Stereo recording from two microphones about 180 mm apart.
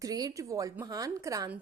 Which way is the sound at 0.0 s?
20° right (ahead or behind).